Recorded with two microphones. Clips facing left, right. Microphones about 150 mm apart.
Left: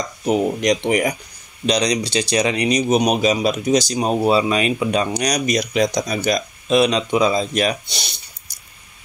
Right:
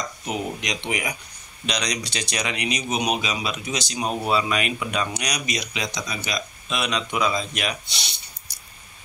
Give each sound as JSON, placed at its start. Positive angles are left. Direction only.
{"t": 0.3, "sound": "speech", "side_deg": 45}
{"t": 1.7, "sound": "speech", "side_deg": 30}